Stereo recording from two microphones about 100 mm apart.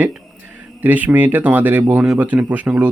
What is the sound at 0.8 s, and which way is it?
Speech, 15° right (ahead or behind).